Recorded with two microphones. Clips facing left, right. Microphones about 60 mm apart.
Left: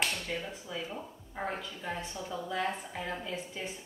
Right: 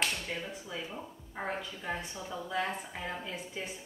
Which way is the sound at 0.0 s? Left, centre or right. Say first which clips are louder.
Left 1 dB; centre.